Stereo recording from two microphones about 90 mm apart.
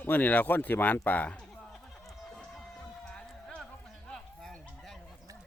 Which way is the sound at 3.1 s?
10° left (ahead or behind).